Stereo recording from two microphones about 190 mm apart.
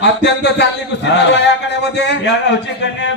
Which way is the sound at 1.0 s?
65° left (ahead or behind).